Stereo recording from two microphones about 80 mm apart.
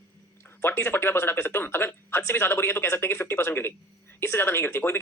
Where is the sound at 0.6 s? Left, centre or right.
Left.